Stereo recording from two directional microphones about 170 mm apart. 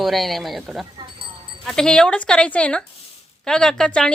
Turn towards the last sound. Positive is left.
turn(degrees=5)  # may be behind; listen again after turning